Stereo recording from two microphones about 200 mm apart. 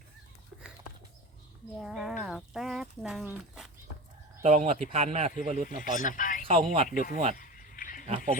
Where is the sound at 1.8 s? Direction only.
Centre (ahead or behind).